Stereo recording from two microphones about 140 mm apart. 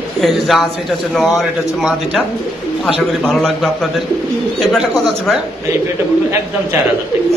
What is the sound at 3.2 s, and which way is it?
Speech, 5° left (ahead or behind).